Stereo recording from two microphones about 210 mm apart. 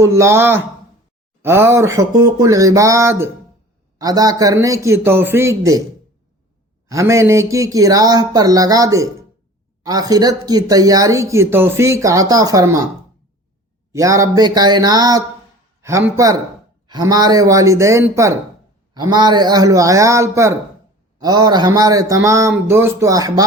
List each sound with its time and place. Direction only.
0.0 s speech: 15° right (ahead or behind)
6.8 s speech: 15° right (ahead or behind)
13.9 s speech: 15° right (ahead or behind)